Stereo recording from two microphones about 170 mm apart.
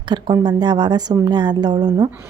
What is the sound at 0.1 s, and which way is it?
A woman's voice, 25° right (ahead or behind).